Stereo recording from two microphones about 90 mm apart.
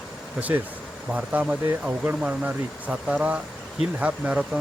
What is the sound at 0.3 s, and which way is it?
Speech, 20° right (ahead or behind).